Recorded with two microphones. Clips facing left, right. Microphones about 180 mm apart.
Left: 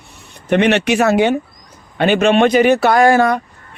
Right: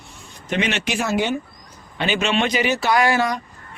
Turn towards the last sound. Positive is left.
turn(degrees=50)  # may be behind; listen again after turning